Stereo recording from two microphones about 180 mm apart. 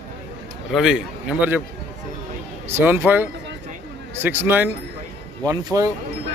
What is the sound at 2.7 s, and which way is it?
A man's voice, 10° right (ahead or behind).